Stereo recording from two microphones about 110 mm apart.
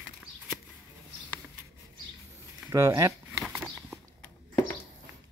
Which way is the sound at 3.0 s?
30° right (ahead or behind).